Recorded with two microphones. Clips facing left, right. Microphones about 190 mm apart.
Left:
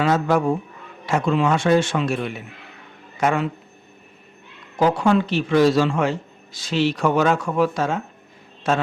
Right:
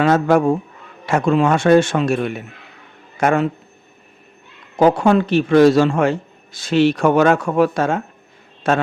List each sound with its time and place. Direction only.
0.0 s a man's voice: 50° right (ahead or behind)
4.8 s a man's voice: 50° right (ahead or behind)